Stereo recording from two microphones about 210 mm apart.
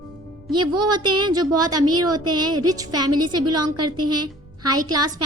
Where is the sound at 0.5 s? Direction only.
20° right (ahead or behind).